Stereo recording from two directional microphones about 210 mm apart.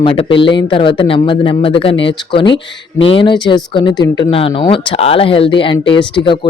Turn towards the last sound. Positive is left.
turn(degrees=20)  # may be behind; listen again after turning